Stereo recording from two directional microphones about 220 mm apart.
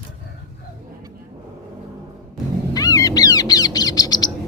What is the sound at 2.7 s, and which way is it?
Bird, 15° left (ahead or behind).